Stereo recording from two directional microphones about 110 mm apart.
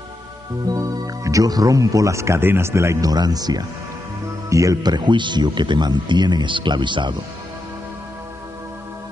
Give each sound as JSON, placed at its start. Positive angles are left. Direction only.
{"t": 0.7, "sound": "speech", "side_deg": -30}